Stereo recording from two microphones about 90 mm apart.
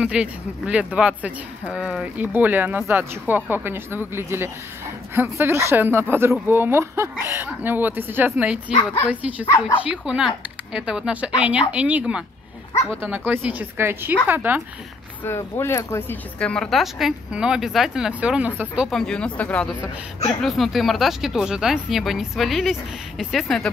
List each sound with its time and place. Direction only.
0.0 s speech: 15° right (ahead or behind)
15.2 s speech: 30° left (ahead or behind)
16.3 s speech: 15° left (ahead or behind)
16.7 s speech: 5° right (ahead or behind)
18.9 s speech: 5° left (ahead or behind)
20.4 s speech: centre (ahead or behind)